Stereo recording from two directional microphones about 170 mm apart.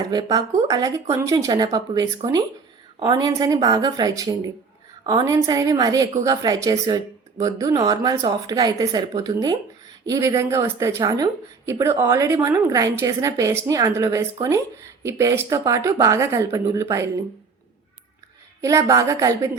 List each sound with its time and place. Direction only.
0.1 s a woman's voice: 20° right (ahead or behind)
18.6 s a woman's voice: 20° right (ahead or behind)